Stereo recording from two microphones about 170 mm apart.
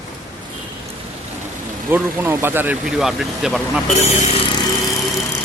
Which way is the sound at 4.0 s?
35° left (ahead or behind).